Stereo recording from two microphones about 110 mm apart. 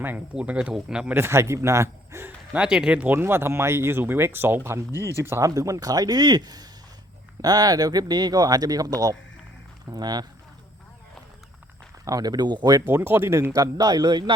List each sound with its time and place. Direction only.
0.3 s speech: 10° right (ahead or behind)
1.1 s speech: 25° right (ahead or behind)
2.5 s speech: 10° right (ahead or behind); by 10.2 s 40° right (ahead or behind)
12.0 s speech: 35° right (ahead or behind)
12.9 s speech: 20° right (ahead or behind); by 14.3 s 45° right (ahead or behind)